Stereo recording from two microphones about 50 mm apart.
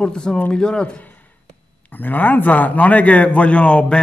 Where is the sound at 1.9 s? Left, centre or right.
Left.